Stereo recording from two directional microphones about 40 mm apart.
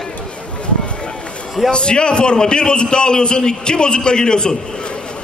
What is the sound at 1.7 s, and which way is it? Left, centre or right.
A man's voice, left.